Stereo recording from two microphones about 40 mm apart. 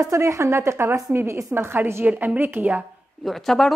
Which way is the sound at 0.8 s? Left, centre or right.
Right.